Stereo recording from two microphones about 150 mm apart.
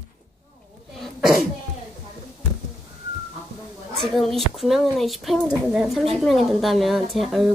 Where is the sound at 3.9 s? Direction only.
Centre (ahead or behind).